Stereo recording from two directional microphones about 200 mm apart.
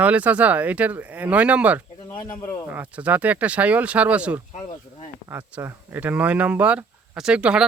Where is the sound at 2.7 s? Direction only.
5° right (ahead or behind).